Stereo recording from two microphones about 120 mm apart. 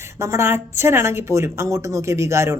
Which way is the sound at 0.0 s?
25° right (ahead or behind).